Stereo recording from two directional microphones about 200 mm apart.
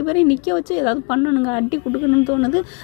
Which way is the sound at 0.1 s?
20° left (ahead or behind).